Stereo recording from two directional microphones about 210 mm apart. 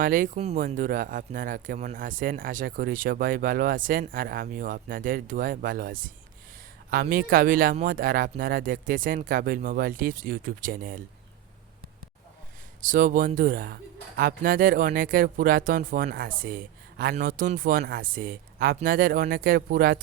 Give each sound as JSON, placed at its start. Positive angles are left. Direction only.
{"t": 0.0, "sound": "speech", "side_deg": -40}
{"t": 12.8, "sound": "speech", "side_deg": -40}